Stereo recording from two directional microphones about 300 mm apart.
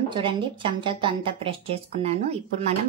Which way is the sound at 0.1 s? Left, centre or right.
Centre.